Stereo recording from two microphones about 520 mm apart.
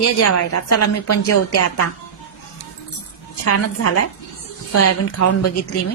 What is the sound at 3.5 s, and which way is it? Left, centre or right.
A woman's voice, left.